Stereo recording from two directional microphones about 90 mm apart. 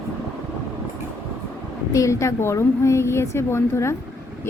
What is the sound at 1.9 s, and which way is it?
A woman's voice, 35° left (ahead or behind).